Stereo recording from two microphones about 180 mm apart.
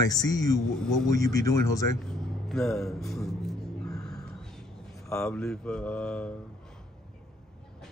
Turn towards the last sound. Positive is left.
turn(degrees=5)  # may be behind; listen again after turning